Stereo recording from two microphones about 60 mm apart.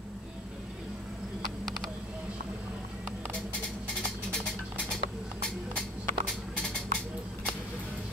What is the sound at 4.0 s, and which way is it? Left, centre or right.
Music, centre.